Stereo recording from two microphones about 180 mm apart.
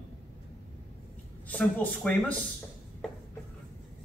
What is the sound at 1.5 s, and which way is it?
Speech, 10° left (ahead or behind).